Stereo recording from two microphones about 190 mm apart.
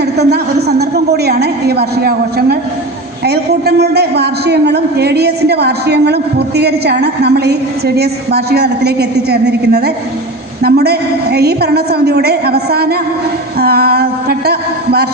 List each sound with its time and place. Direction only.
0.0 s a woman's voice: 60° right (ahead or behind)